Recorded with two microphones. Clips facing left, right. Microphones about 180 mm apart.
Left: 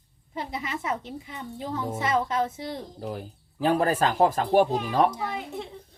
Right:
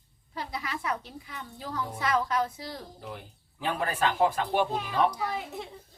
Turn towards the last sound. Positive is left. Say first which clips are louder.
# left 2 dB
turn(degrees=0)  # may be behind; listen again after turning